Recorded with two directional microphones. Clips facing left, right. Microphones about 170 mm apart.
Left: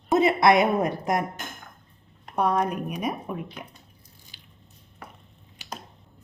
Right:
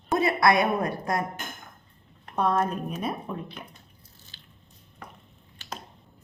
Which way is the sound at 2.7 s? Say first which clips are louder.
Left 2 dB; 10° left (ahead or behind).